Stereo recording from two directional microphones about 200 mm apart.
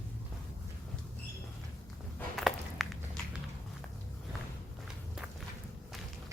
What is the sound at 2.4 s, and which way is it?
Walk, centre (ahead or behind).